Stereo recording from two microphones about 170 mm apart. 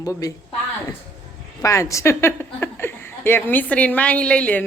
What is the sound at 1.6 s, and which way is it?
Speech, 20° left (ahead or behind).